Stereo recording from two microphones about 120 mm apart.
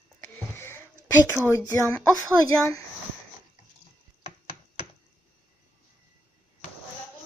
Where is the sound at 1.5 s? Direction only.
25° left (ahead or behind).